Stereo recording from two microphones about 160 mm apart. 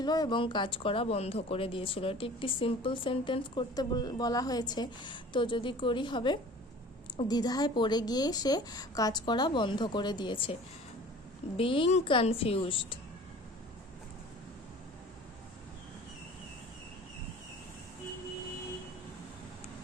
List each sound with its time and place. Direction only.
0.0 s a woman's voice: 25° left (ahead or behind)